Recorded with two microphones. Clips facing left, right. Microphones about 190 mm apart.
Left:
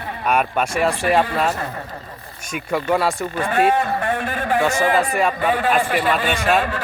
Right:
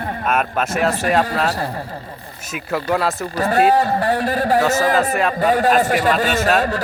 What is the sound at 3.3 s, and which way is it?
A man's voice, 40° right (ahead or behind).